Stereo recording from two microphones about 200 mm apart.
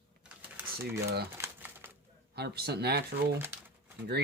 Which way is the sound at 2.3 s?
55° right (ahead or behind).